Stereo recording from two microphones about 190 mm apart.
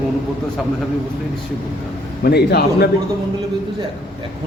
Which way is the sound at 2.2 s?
55° left (ahead or behind).